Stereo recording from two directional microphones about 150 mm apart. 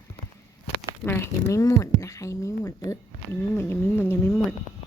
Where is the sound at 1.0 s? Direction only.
15° left (ahead or behind).